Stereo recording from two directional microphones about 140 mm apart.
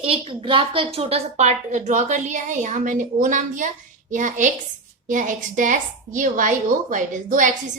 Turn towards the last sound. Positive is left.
turn(degrees=-65)  # may be behind; listen again after turning